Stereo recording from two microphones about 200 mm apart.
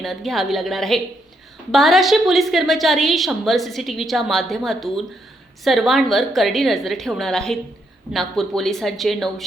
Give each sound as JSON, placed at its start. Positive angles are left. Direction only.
{"t": 0.0, "sound": "a woman's voice", "side_deg": 0}